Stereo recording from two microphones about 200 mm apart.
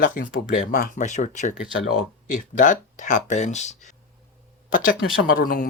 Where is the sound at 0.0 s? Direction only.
40° left (ahead or behind).